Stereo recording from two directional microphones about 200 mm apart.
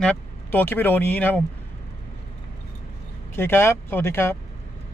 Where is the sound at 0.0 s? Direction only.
10° left (ahead or behind).